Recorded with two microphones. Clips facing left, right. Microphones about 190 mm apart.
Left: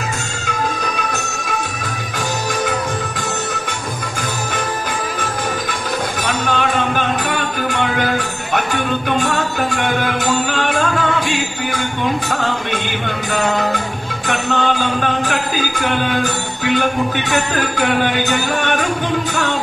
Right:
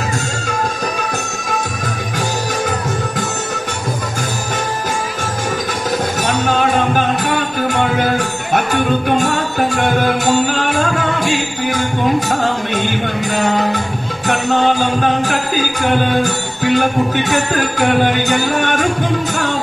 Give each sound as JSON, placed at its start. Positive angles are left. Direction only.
{"t": 6.2, "sound": "music", "side_deg": -40}
{"t": 14.2, "sound": "music", "side_deg": -40}